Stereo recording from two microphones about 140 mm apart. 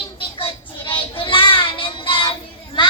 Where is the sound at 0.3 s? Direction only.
40° left (ahead or behind).